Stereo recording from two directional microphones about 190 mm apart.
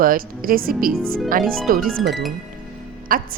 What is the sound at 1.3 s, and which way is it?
Speech, 50° right (ahead or behind).